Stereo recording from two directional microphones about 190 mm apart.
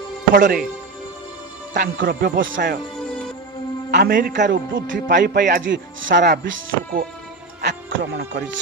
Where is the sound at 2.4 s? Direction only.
85° right.